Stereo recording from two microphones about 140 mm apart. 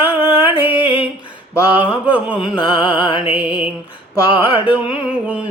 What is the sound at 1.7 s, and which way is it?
Mantra, 10° right (ahead or behind).